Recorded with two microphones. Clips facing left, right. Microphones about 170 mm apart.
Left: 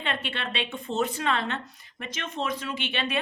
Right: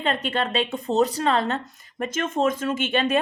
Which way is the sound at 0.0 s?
40° right (ahead or behind).